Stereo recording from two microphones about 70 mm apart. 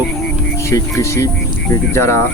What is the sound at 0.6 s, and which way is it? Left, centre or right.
Speech, left.